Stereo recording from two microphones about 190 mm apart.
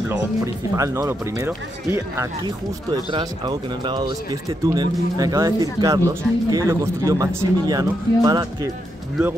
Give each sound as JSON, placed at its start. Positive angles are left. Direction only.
{"t": 0.7, "sound": "speech", "side_deg": -15}